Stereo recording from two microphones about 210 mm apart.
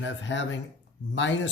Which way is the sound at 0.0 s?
60° left (ahead or behind).